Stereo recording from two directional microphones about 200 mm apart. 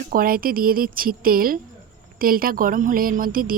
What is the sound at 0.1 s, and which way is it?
Speech, 45° right (ahead or behind).